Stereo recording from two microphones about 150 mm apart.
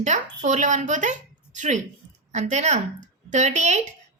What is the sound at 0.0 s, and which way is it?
A woman's voice, 55° right (ahead or behind).